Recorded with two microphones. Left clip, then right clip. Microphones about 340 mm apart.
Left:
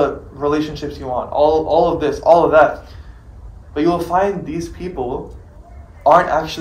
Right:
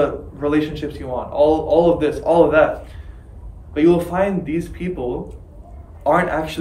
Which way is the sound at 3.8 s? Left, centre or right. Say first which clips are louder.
Even; centre.